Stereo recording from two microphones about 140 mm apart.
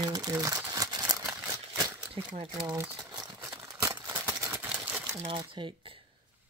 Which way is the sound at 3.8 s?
25° right (ahead or behind).